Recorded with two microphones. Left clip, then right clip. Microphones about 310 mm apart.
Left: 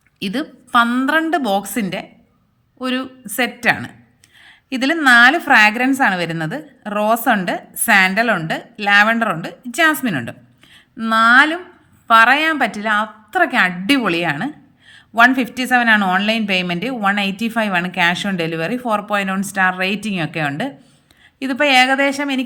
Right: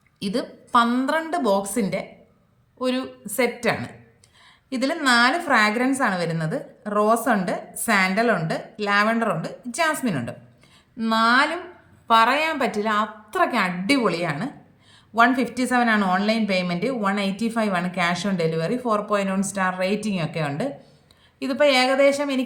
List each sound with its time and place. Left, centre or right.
0.2 s a woman's voice: centre